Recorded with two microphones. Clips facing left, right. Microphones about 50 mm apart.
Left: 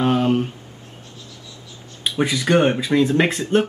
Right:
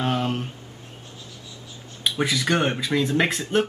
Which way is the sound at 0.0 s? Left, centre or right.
Centre.